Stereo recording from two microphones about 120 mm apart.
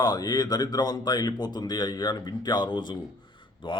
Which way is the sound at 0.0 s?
35° left (ahead or behind).